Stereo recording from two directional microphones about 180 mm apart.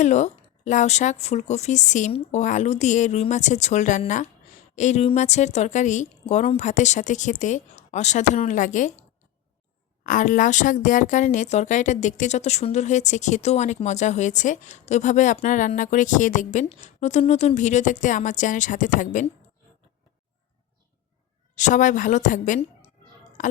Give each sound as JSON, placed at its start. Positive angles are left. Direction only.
{"t": 0.0, "sound": "a woman's voice", "side_deg": 40}
{"t": 10.0, "sound": "speech", "side_deg": 45}
{"t": 21.5, "sound": "speech", "side_deg": 45}
{"t": 23.4, "sound": "a sound", "side_deg": 45}